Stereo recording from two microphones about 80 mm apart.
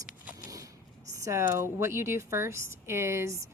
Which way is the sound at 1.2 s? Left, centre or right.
Right.